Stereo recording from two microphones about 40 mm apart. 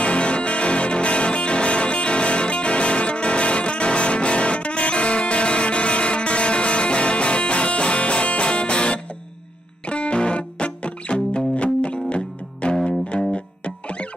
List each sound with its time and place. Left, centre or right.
0.0 s music: left